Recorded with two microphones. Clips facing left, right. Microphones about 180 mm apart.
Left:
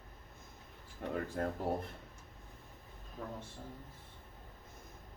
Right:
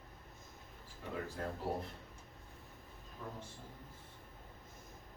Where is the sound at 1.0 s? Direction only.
60° left (ahead or behind).